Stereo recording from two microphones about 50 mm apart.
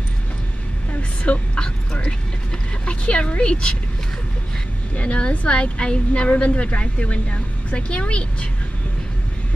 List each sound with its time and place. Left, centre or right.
1.2 s a woman's voice: left
4.9 s a woman's voice: left